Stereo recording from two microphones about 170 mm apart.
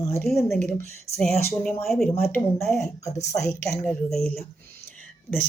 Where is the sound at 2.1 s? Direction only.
15° left (ahead or behind).